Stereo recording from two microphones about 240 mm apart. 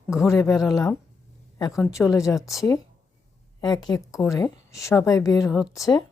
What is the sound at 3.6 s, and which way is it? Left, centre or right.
Speech, centre.